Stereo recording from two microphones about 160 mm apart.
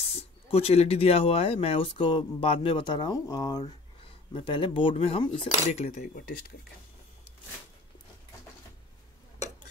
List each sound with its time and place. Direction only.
0.1 s speech: 40° left (ahead or behind)